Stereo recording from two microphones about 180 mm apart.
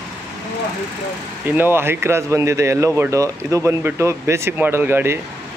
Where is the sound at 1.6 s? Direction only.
15° right (ahead or behind).